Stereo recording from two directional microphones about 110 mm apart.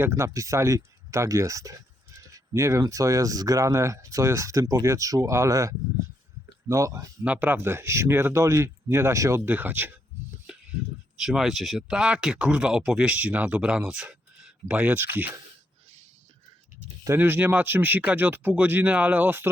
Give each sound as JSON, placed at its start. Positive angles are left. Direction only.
{"t": 0.0, "sound": "speech", "side_deg": -25}
{"t": 7.3, "sound": "speech", "side_deg": -15}
{"t": 11.2, "sound": "speech", "side_deg": 0}
{"t": 17.2, "sound": "speech", "side_deg": -15}